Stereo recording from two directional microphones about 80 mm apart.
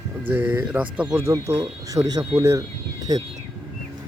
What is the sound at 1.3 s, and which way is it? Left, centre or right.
Speech, right.